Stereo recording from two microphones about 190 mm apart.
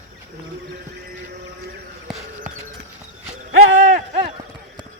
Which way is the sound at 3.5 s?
45° right (ahead or behind).